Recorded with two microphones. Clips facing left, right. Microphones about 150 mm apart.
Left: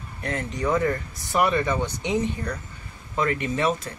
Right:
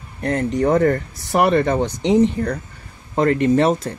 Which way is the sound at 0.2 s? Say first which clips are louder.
Right 9 dB; 35° right (ahead or behind).